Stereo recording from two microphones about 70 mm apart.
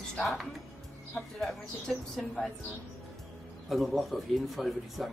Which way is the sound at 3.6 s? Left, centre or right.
Centre.